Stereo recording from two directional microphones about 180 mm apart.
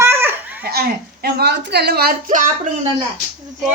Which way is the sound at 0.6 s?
60° right (ahead or behind).